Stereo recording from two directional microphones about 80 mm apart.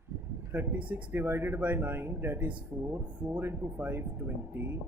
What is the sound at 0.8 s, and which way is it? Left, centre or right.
Speech, centre.